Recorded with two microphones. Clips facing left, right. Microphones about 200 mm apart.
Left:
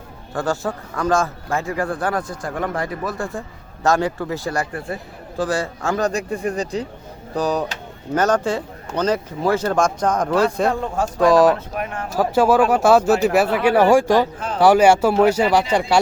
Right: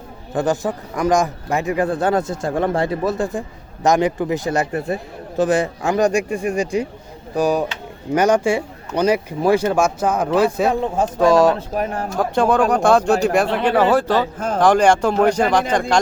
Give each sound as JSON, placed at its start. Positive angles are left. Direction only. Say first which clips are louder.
{"t": 0.3, "sound": "a man's voice", "louder": "right 3 dB", "side_deg": -15}
{"t": 11.2, "sound": "speech", "louder": "even", "side_deg": 0}
{"t": 11.5, "sound": "speech", "louder": "right 4 dB", "side_deg": -35}
{"t": 12.1, "sound": "speech", "louder": "left 2 dB", "side_deg": 5}
{"t": 14.3, "sound": "speech", "louder": "right 5 dB", "side_deg": -45}
{"t": 14.6, "sound": "speech", "louder": "left 1 dB", "side_deg": 10}